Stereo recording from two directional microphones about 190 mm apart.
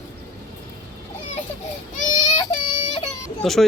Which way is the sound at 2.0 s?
40° left (ahead or behind).